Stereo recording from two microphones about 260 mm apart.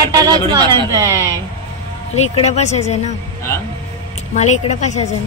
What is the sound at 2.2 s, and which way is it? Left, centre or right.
Speech, left.